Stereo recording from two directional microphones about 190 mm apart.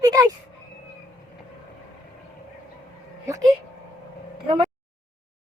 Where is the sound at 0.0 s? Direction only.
20° right (ahead or behind).